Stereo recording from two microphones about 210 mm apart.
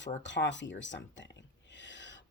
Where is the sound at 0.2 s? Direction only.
60° left (ahead or behind).